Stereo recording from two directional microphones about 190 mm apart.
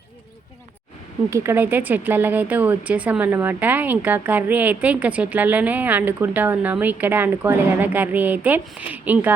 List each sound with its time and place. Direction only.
1.3 s speech: 10° right (ahead or behind)